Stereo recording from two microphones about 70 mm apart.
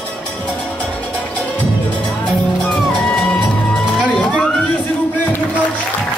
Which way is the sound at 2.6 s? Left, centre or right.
Centre.